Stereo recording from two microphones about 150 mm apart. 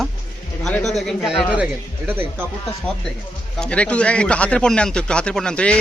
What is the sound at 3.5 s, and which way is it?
Speech, 5° left (ahead or behind).